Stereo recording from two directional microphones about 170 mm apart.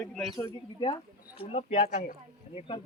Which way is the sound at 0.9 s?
35° left (ahead or behind).